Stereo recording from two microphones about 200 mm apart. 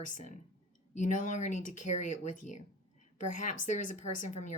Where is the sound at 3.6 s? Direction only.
40° left (ahead or behind).